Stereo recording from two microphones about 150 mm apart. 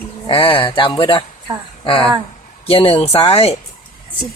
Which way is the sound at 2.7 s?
40° left (ahead or behind).